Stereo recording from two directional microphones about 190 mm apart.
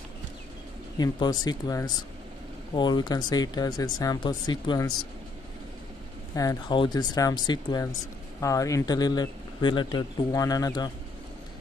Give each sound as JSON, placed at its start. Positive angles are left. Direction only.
{"t": 0.9, "sound": "speech", "side_deg": 20}
{"t": 6.3, "sound": "speech", "side_deg": 20}